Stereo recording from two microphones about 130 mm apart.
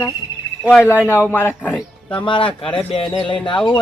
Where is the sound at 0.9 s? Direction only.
15° right (ahead or behind).